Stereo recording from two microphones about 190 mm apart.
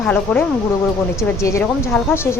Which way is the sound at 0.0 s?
10° left (ahead or behind).